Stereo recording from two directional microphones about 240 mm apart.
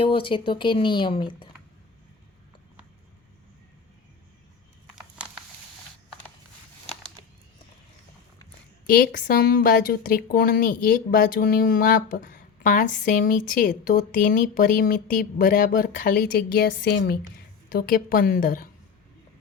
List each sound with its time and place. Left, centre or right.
0.0 s speech: left
4.9 s a sound: centre
8.9 s a woman's voice: left